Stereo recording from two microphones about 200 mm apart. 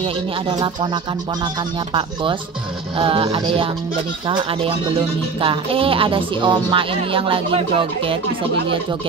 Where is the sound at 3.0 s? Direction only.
25° right (ahead or behind).